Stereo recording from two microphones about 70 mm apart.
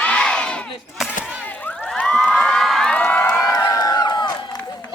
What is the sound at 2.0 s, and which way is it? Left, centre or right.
Cheering, centre.